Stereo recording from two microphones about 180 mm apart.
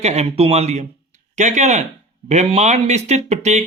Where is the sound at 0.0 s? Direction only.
35° right (ahead or behind).